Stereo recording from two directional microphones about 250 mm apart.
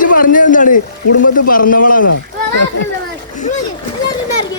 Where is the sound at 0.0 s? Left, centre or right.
Left.